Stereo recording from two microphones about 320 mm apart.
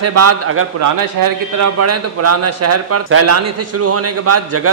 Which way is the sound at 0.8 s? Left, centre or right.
Right.